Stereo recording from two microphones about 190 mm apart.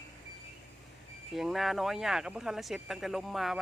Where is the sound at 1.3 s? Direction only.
Centre (ahead or behind).